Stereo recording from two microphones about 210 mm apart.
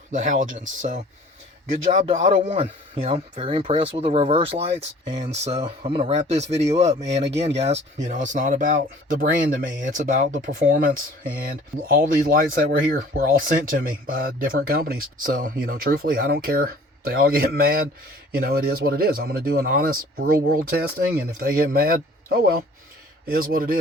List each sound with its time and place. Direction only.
0.1 s speech: 40° right (ahead or behind)